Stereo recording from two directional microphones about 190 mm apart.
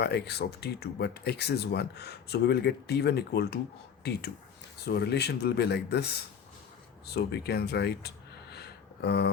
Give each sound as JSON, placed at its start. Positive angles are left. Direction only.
{"t": 0.0, "sound": "speech", "side_deg": 60}
{"t": 7.1, "sound": "speech", "side_deg": 60}